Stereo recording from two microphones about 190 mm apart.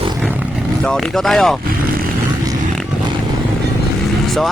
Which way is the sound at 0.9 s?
Centre (ahead or behind).